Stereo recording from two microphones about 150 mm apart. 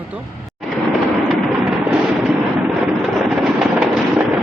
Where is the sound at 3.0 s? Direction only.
Centre (ahead or behind).